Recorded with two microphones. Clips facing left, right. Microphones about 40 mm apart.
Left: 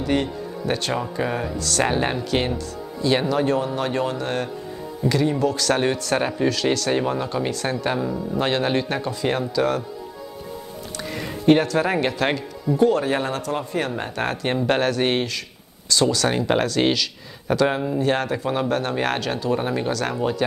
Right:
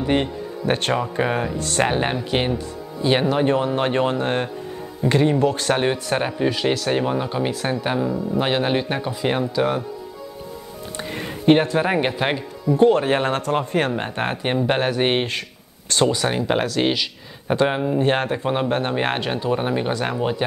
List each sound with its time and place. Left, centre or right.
0.0 s speech: right
0.7 s speech: right
1.9 s speech: centre
11.0 s speech: right
12.7 s speech: right
15.9 s speech: right
16.3 s speech: centre
16.9 s speech: centre
17.9 s speech: right